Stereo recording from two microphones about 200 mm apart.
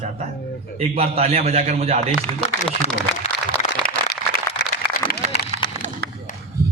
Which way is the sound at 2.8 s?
35° left (ahead or behind).